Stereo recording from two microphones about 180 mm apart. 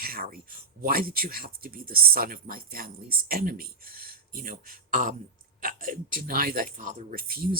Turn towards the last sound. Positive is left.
turn(degrees=-55)  # may be behind; listen again after turning